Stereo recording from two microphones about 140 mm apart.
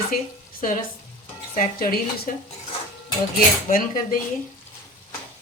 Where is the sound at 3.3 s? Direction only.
85° left.